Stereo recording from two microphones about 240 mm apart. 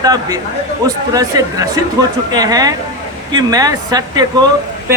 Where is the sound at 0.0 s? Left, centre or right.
Centre.